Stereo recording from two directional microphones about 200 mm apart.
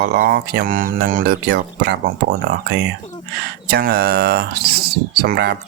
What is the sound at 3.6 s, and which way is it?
Speech, 50° right (ahead or behind).